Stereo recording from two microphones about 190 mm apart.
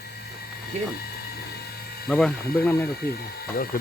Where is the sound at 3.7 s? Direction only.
50° left (ahead or behind).